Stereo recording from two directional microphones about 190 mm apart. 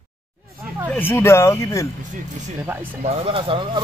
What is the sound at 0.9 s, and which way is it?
Speech, 10° left (ahead or behind).